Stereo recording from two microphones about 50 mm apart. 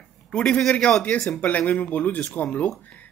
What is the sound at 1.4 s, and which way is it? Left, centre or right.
Speech, left.